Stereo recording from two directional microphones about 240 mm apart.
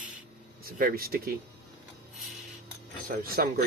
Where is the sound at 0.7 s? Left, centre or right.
Right.